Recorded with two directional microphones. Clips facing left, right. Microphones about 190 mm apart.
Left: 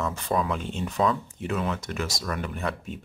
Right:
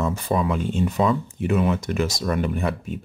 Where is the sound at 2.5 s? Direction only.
10° right (ahead or behind).